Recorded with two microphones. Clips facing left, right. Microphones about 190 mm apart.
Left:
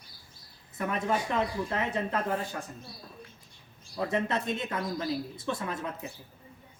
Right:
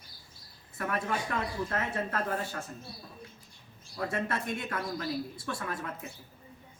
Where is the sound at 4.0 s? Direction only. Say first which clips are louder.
Left 3 dB; 20° left (ahead or behind).